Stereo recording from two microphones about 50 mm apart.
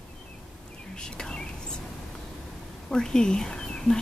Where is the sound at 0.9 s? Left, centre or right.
Centre.